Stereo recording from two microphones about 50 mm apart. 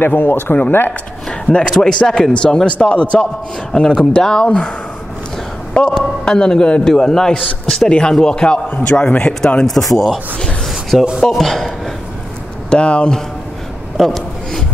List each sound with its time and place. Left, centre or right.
0.0 s speech: left
1.5 s a man's voice: centre
5.8 s a man's voice: centre
9.9 s speech: centre
10.7 s a sound: centre
11.1 s a man's voice: centre
12.6 s speech: left
13.9 s a sound: centre